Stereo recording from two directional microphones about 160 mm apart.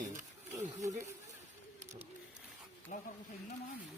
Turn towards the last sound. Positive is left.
turn(degrees=50)  # may be behind; listen again after turning